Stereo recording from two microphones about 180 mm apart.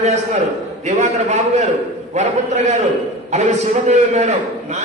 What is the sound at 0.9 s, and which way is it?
Speech, 35° right (ahead or behind).